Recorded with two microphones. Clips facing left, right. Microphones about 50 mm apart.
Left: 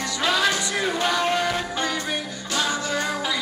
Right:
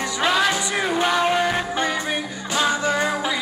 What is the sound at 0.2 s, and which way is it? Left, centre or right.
Music, centre.